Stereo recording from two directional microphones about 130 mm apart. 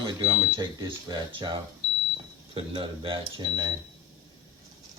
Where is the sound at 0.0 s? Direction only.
35° right (ahead or behind).